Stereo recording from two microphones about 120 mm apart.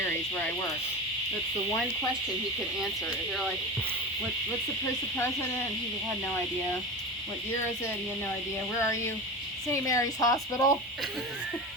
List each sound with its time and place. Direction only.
0.0 s cricket: 15° left (ahead or behind)
2.8 s speech: centre (ahead or behind)
8.8 s speech: 25° left (ahead or behind)